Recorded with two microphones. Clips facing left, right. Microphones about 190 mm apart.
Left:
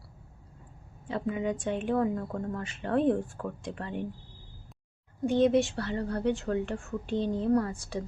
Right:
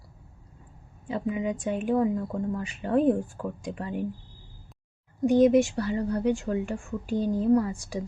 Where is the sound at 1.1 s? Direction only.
15° right (ahead or behind).